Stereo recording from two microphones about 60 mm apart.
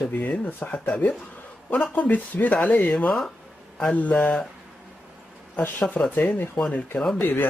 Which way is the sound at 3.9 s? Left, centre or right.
Left.